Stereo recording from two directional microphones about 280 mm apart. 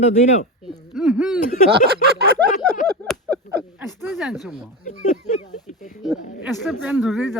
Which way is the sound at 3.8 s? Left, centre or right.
Centre.